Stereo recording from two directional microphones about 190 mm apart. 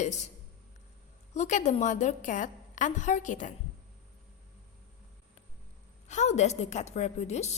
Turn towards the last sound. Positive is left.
turn(degrees=35)  # may be behind; listen again after turning